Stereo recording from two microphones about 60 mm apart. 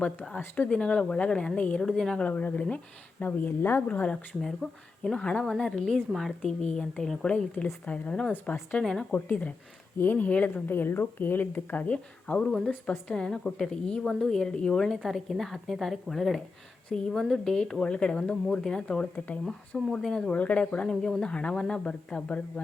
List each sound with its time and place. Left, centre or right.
0.0 s speech: left
1.8 s a woman's voice: centre
2.1 s speech: left
3.8 s speech: left
4.4 s a woman's voice: centre
8.8 s speech: centre
9.1 s speech: left
10.7 s speech: left
12.5 s a woman's voice: centre
13.1 s a woman's voice: centre
20.4 s speech: left
20.9 s speech: centre